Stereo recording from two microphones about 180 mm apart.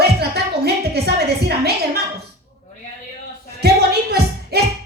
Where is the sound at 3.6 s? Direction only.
60° right (ahead or behind).